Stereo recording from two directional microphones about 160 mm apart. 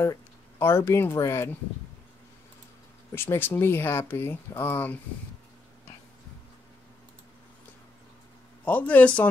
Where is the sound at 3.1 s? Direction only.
15° left (ahead or behind).